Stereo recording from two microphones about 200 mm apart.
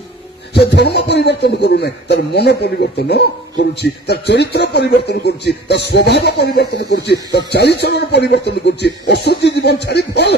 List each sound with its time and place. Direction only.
0.6 s a man's voice: 55° left (ahead or behind)